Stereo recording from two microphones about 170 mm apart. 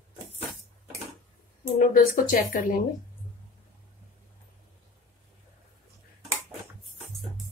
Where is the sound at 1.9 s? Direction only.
55° left (ahead or behind).